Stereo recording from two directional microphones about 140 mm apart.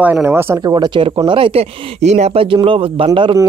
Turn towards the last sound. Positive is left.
turn(degrees=-35)  # may be behind; listen again after turning